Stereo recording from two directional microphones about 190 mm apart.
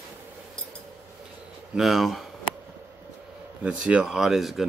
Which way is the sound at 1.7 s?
Centre (ahead or behind).